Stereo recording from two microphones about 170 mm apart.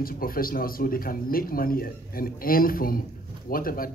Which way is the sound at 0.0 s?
60° left (ahead or behind).